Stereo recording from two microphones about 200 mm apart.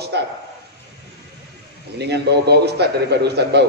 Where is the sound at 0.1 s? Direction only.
55° right (ahead or behind).